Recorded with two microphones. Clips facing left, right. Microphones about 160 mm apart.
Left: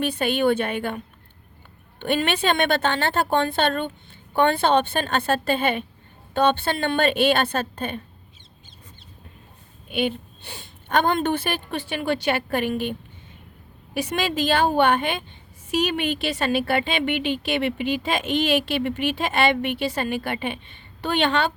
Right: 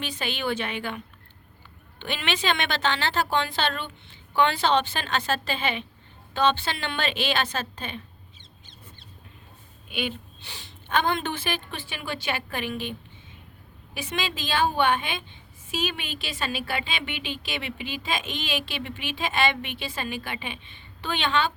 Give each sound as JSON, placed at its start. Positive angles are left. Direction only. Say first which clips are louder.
{"t": 0.0, "sound": "a woman's voice", "louder": "left 9 dB", "side_deg": 60}
{"t": 9.9, "sound": "a woman's voice", "louder": "left 7 dB", "side_deg": 55}
{"t": 14.8, "sound": "a woman's voice", "louder": "left 5 dB", "side_deg": 45}